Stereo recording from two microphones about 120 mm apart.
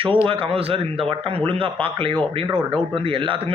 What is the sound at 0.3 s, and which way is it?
A man's voice, 45° right (ahead or behind).